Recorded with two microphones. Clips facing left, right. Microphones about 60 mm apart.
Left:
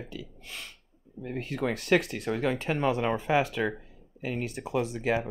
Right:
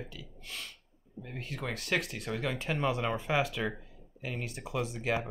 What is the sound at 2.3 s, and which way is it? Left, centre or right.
Speech, centre.